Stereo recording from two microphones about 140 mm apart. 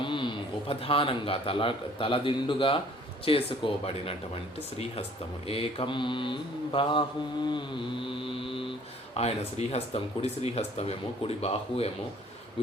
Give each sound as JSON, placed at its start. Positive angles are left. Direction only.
{"t": 0.0, "sound": "a man's voice", "side_deg": 35}
{"t": 5.5, "sound": "mantra", "side_deg": 45}
{"t": 9.1, "sound": "speech", "side_deg": 50}